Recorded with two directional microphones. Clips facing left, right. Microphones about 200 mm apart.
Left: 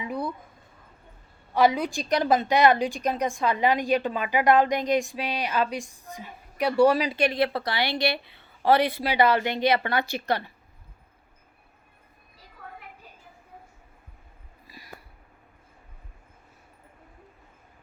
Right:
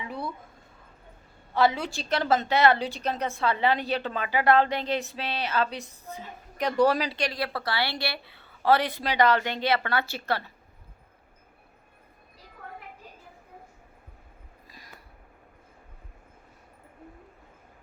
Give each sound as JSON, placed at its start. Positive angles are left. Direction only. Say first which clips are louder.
{"t": 0.1, "sound": "a sound", "louder": "left 5 dB", "side_deg": 15}
{"t": 1.5, "sound": "a woman's voice", "louder": "left 3 dB", "side_deg": 15}
{"t": 7.2, "sound": "a woman's voice", "louder": "left 6 dB", "side_deg": 20}